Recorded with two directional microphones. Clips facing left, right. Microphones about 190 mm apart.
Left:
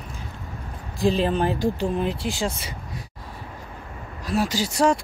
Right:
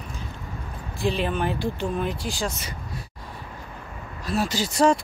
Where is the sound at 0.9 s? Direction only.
35° left (ahead or behind).